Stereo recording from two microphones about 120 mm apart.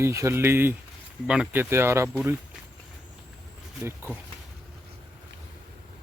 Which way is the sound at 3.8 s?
15° right (ahead or behind).